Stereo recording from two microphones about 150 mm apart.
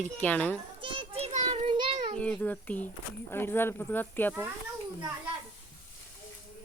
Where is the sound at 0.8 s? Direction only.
40° right (ahead or behind).